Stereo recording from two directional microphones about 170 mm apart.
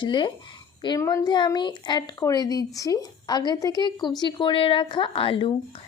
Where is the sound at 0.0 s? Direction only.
30° left (ahead or behind).